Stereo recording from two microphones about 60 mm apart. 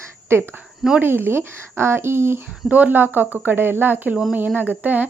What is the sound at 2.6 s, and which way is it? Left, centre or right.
Speech, right.